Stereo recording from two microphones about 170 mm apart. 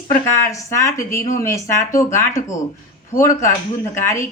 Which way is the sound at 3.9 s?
15° left (ahead or behind).